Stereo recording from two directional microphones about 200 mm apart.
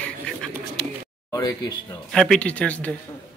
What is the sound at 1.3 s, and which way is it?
Speech, 20° left (ahead or behind).